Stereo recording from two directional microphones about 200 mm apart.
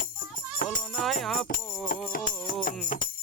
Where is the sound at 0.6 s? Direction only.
45° left (ahead or behind).